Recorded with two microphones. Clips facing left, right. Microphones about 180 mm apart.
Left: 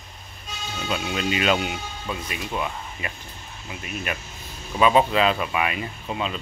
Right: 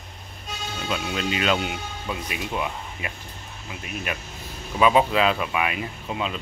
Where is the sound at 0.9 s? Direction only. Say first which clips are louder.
Left 1 dB; 5° left (ahead or behind).